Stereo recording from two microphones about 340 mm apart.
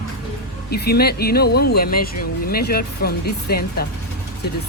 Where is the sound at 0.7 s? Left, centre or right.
Left.